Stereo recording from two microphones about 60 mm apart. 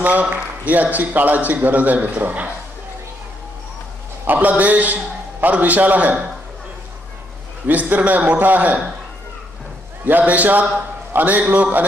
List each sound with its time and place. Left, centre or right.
0.0 s a man's voice: right
4.3 s a man's voice: right
7.6 s a man's voice: right
10.0 s a man's voice: right